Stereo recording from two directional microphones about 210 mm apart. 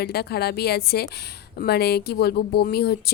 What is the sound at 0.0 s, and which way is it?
Speech, 50° left (ahead or behind).